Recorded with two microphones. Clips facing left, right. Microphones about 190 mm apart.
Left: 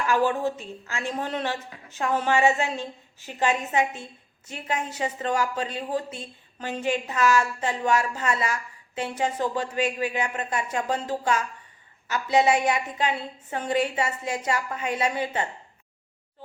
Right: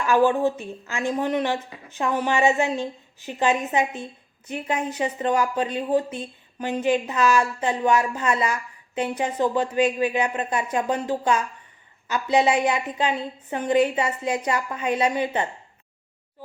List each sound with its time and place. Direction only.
0.1 s a woman's voice: 15° right (ahead or behind)